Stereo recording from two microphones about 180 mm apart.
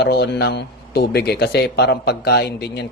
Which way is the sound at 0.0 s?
65° left (ahead or behind).